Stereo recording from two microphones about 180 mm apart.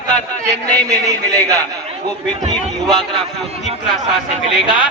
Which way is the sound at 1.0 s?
20° right (ahead or behind).